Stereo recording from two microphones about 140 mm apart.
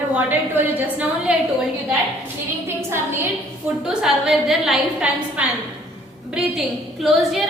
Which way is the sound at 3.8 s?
5° right (ahead or behind).